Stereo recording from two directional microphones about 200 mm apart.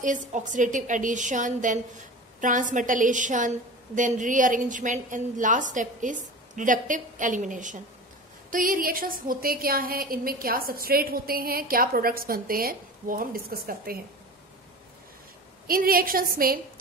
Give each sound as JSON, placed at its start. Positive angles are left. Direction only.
{"t": 0.0, "sound": "a woman's voice", "side_deg": -40}
{"t": 15.6, "sound": "a woman's voice", "side_deg": -45}